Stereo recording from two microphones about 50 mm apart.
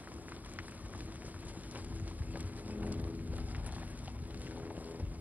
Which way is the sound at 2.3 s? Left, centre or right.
Right.